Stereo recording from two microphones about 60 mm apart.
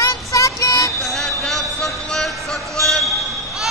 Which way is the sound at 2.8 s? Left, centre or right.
Centre.